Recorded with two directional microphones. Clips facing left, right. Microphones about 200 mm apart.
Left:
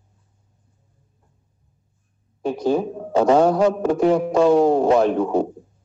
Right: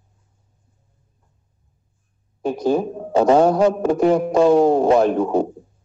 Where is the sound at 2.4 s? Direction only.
45° right (ahead or behind).